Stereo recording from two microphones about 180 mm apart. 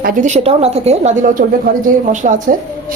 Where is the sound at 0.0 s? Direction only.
45° right (ahead or behind).